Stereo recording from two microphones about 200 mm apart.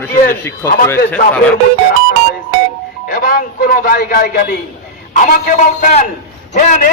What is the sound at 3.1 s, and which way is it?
A man's voice, 50° left (ahead or behind).